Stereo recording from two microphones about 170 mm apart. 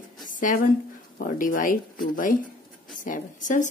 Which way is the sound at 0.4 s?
50° left (ahead or behind).